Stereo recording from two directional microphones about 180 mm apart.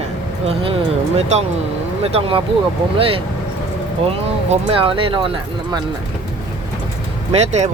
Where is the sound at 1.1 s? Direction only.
35° right (ahead or behind).